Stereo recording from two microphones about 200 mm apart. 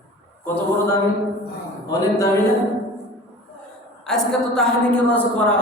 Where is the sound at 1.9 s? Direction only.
15° left (ahead or behind).